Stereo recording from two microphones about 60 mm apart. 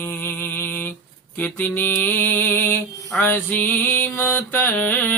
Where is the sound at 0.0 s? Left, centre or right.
Left.